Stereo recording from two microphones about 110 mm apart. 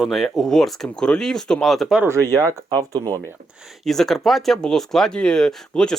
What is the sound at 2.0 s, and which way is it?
Speech, 25° right (ahead or behind).